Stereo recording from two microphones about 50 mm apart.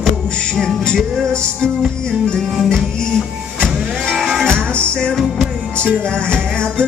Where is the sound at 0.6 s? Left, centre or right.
Centre.